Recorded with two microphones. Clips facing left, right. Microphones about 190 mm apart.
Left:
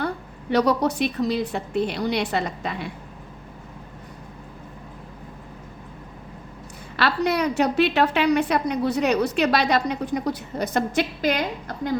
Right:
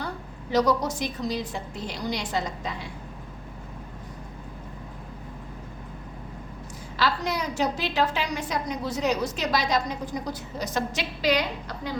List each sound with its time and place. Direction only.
0.5 s a woman's voice: 65° left (ahead or behind)
6.9 s a woman's voice: 65° left (ahead or behind)